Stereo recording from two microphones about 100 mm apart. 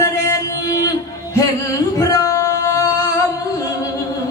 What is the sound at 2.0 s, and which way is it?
Male singing, 35° left (ahead or behind).